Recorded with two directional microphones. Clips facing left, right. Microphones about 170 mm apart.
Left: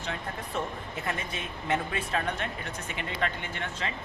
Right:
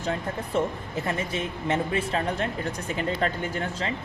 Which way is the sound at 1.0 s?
30° right (ahead or behind).